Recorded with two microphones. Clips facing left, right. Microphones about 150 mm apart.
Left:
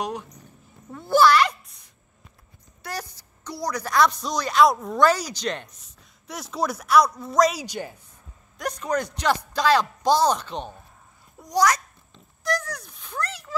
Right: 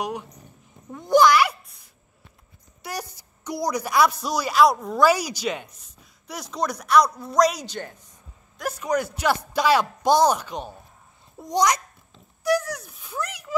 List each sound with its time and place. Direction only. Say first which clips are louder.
0.9 s a sound: right 1 dB; 15° right (ahead or behind)
2.8 s a woman's voice: right 1 dB; 15° right (ahead or behind)
7.6 s speech: left 1 dB; 10° left (ahead or behind)
8.5 s a man's voice: right 1 dB; 5° right (ahead or behind)
11.3 s a child's voice: even; 25° right (ahead or behind)
12.1 s a sound: right 5 dB; 10° right (ahead or behind)